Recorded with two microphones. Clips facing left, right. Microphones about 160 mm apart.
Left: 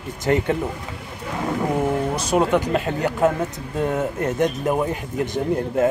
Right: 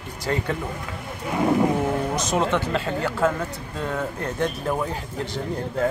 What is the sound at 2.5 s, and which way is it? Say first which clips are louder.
Speech: left 4 dB; 15° left (ahead or behind).